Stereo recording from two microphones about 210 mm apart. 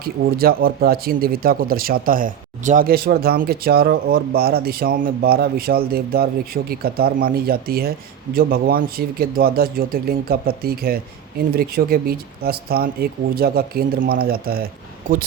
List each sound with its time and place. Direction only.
0.0 s speech: 45° right (ahead or behind)